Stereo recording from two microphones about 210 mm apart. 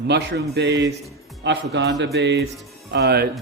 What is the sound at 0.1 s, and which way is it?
A man's voice, 50° right (ahead or behind).